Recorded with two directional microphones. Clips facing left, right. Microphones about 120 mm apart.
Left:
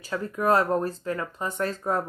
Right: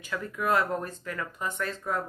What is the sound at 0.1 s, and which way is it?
Speech, 35° left (ahead or behind).